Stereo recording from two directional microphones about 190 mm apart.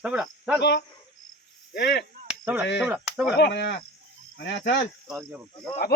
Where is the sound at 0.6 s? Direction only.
60° left (ahead or behind).